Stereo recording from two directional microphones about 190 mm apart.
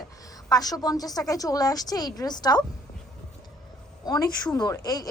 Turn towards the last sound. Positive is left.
turn(degrees=20)  # may be behind; listen again after turning